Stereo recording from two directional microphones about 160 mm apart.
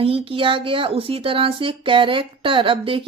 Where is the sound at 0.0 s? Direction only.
35° right (ahead or behind).